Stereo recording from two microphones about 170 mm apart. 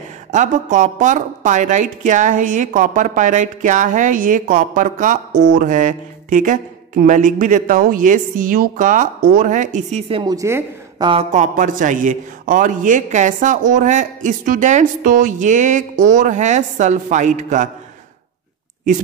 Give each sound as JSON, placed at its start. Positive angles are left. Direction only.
{"t": 0.3, "sound": "speech", "side_deg": -45}
{"t": 10.3, "sound": "a woman's voice", "side_deg": -20}
{"t": 11.3, "sound": "speech", "side_deg": -50}